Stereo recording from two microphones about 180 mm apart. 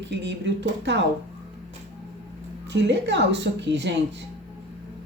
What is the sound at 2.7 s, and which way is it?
Speech, 75° right (ahead or behind).